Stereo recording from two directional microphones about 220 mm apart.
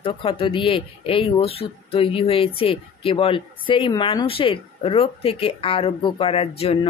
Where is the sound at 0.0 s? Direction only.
25° left (ahead or behind).